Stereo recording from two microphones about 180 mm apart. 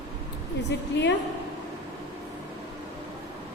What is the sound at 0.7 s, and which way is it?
Speech, 75° left (ahead or behind).